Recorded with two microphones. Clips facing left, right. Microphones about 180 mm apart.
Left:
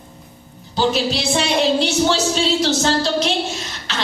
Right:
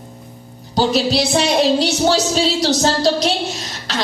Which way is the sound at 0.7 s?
40° right (ahead or behind).